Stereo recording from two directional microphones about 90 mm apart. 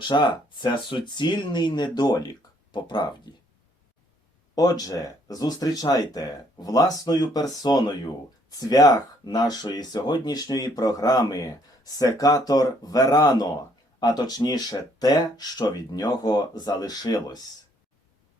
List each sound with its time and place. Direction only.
0.1 s speech: 55° left (ahead or behind)
4.5 s speech: 45° left (ahead or behind)